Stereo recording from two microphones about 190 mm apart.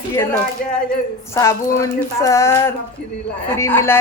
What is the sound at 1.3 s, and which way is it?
A woman's voice, 15° left (ahead or behind).